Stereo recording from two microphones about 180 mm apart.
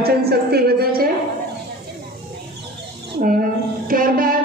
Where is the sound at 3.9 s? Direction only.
50° right (ahead or behind).